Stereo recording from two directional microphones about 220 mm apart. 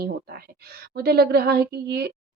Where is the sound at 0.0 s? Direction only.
45° right (ahead or behind).